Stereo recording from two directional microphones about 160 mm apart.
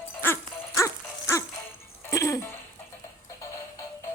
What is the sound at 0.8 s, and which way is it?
Music, 20° left (ahead or behind).